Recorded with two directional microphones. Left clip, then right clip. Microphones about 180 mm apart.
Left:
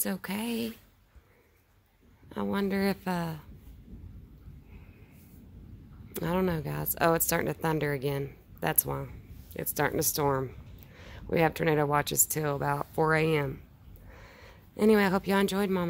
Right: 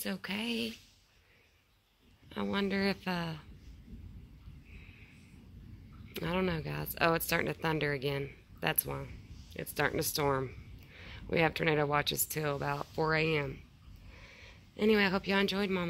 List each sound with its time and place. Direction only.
0.0 s speech: 25° left (ahead or behind)
2.2 s speech: 15° left (ahead or behind)
6.1 s speech: 20° left (ahead or behind)